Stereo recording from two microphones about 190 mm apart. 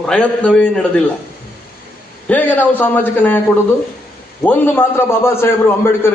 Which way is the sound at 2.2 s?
10° left (ahead or behind).